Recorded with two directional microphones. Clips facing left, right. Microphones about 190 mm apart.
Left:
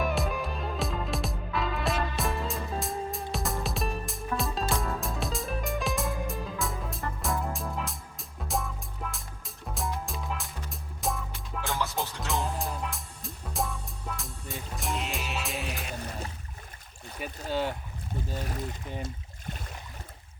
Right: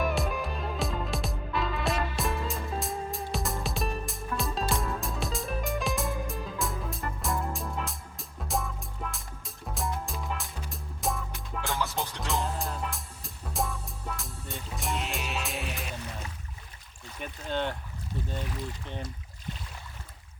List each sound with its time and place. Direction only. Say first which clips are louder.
0.0 s music: even; centre (ahead or behind)
17.5 s boat: left 1 dB; 5° left (ahead or behind)
18.3 s boat: left 2 dB; 45° left (ahead or behind)